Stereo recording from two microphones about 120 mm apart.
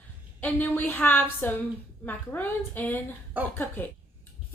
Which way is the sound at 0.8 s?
15° left (ahead or behind).